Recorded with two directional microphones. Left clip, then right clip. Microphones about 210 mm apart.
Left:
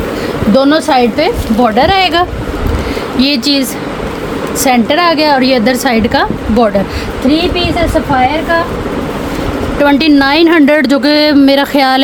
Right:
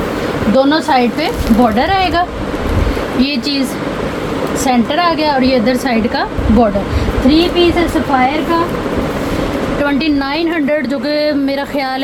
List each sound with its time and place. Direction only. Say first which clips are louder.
0.5 s a woman's voice: left 3 dB; 55° left (ahead or behind)
9.8 s speech: left 9 dB; 55° left (ahead or behind)